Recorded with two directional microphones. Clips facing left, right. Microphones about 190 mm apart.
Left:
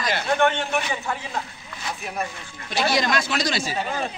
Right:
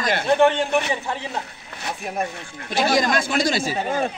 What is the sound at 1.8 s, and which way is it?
Speech, 50° right (ahead or behind).